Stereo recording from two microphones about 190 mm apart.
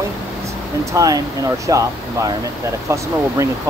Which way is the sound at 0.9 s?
20° right (ahead or behind).